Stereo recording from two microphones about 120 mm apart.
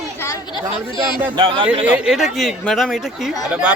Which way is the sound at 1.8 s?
10° right (ahead or behind).